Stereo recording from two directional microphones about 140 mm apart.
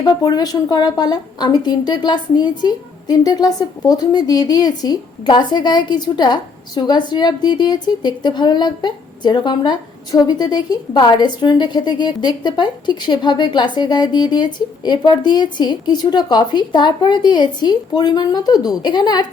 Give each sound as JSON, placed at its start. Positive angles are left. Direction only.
{"t": 0.0, "sound": "a woman's voice", "side_deg": 30}